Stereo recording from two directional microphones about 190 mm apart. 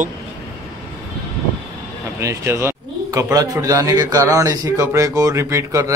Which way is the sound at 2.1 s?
15° right (ahead or behind).